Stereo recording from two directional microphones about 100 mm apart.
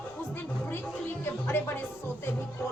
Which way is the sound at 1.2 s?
25° left (ahead or behind).